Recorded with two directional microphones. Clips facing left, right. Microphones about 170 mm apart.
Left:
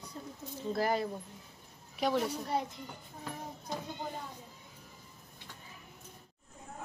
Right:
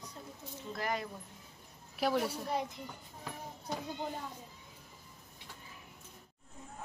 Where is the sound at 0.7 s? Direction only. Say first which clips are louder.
Left 5 dB; 35° left (ahead or behind).